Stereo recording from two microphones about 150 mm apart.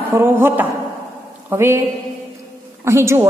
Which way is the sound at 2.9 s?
15° right (ahead or behind).